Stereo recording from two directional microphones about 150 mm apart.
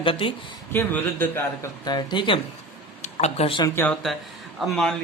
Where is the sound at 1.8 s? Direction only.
30° left (ahead or behind).